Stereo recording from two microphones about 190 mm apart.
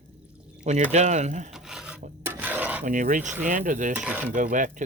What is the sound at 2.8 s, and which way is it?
Speech, 45° right (ahead or behind).